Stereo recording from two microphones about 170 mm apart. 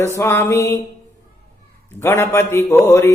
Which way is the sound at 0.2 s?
15° left (ahead or behind).